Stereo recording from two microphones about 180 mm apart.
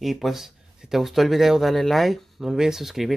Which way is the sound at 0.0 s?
Centre (ahead or behind).